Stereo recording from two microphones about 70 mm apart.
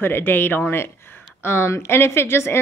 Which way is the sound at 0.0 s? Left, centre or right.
Left.